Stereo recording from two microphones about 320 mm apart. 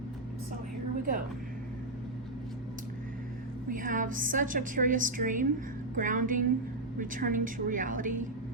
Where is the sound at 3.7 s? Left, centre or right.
Right.